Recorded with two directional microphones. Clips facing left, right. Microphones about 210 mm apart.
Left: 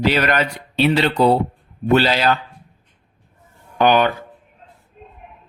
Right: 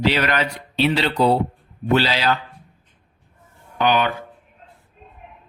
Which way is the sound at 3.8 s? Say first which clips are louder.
Left 4 dB; 45° left (ahead or behind).